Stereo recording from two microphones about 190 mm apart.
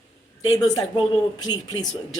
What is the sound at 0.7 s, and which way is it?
Speech, 25° left (ahead or behind).